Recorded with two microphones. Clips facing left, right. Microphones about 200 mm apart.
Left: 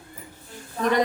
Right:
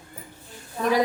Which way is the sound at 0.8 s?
5° right (ahead or behind).